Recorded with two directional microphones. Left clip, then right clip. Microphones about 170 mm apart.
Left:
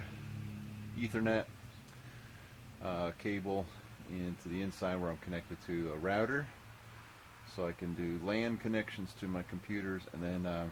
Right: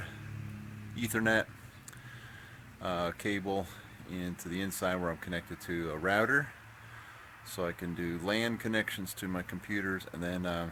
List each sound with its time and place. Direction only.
1.0 s speech: 15° right (ahead or behind)
2.8 s speech: 15° right (ahead or behind)
7.5 s speech: 15° right (ahead or behind)